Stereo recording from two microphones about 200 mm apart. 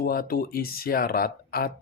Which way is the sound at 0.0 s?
45° left (ahead or behind).